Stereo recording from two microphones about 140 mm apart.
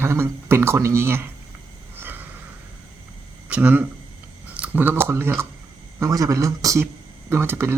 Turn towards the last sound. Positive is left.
turn(degrees=-15)  # may be behind; listen again after turning